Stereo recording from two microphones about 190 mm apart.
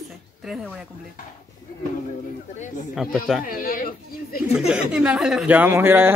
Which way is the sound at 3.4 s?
50° left (ahead or behind).